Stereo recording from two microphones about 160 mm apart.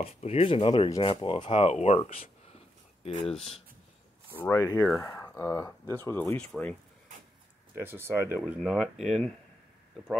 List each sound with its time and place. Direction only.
0.0 s speech: 40° left (ahead or behind)
3.0 s speech: 40° left (ahead or behind)
4.4 s speech: 20° left (ahead or behind)
7.8 s speech: 15° right (ahead or behind)